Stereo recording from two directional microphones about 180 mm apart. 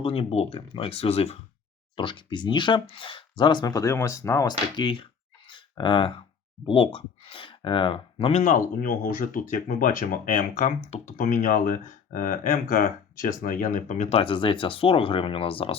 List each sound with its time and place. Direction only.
0.0 s speech: 30° left (ahead or behind)
5.5 s a sound: 25° left (ahead or behind)
6.7 s speech: 30° left (ahead or behind)
11.2 s speech: 50° left (ahead or behind); by 15.7 s 30° left (ahead or behind)